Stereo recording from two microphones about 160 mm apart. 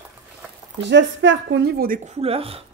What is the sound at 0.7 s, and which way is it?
Speech, 90° right.